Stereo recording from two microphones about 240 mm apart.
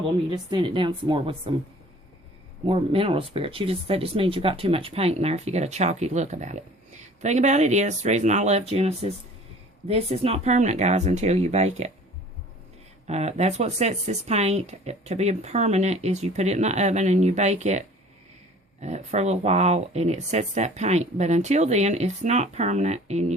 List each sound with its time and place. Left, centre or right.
0.3 s speech: centre
2.6 s speech: right
13.1 s speech: right